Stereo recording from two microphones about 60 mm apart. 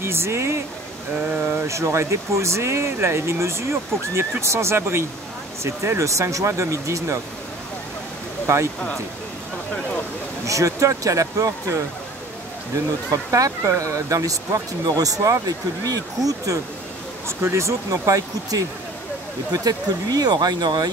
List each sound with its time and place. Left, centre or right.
0.0 s speech: right
1.3 s speech: right
1.7 s speech: right
8.5 s speech: right
10.4 s speech: right
13.1 s speech: right
17.4 s speech: right
17.9 s speech: right
19.5 s speech: right